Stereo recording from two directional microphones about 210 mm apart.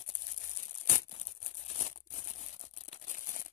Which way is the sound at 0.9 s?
30° left (ahead or behind).